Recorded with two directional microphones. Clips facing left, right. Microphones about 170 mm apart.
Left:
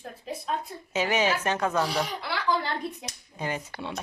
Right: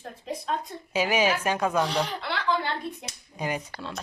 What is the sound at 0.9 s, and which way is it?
Speech, 10° right (ahead or behind).